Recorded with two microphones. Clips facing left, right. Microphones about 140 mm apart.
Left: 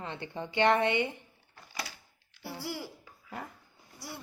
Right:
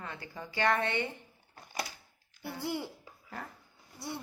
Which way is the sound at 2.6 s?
20° right (ahead or behind).